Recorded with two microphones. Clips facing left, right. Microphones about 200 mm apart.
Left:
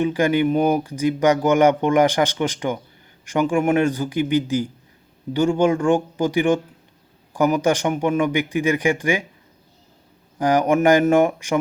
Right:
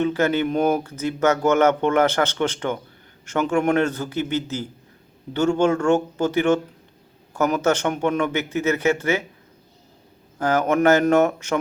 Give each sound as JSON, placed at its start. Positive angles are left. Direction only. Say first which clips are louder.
{"t": 0.0, "sound": "speech", "louder": "left 2 dB", "side_deg": 15}
{"t": 10.3, "sound": "speech", "louder": "left 2 dB", "side_deg": 15}